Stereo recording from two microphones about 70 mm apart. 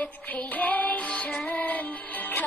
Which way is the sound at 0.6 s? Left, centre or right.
Left.